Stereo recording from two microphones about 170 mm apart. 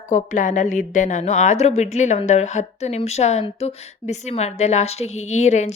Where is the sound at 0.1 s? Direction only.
50° left (ahead or behind).